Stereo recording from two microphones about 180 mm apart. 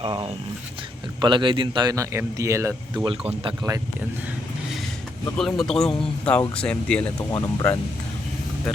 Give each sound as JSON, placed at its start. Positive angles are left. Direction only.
{"t": 0.0, "sound": "a man's voice", "side_deg": -30}
{"t": 5.4, "sound": "speech", "side_deg": 0}
{"t": 7.3, "sound": "speech", "side_deg": 20}